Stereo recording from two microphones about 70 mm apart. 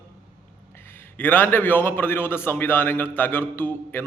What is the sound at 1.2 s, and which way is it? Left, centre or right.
A man's voice, left.